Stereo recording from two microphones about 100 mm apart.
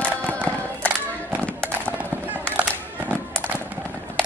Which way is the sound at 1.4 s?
15° left (ahead or behind).